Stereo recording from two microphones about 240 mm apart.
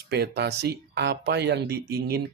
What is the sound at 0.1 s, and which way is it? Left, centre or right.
Speech, right.